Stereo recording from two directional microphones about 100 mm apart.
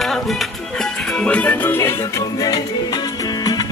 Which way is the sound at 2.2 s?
40° left (ahead or behind).